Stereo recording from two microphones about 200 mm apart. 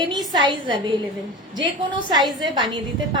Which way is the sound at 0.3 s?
25° right (ahead or behind).